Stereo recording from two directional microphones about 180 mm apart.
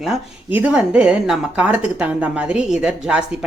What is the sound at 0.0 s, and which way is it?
Speech, 5° right (ahead or behind).